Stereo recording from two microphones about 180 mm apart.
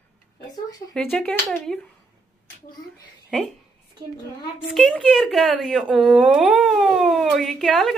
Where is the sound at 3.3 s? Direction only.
5° left (ahead or behind).